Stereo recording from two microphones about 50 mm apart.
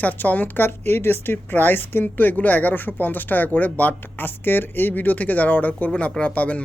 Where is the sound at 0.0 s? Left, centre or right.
Left.